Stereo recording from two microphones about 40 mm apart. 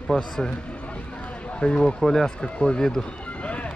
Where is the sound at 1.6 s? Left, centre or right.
Centre.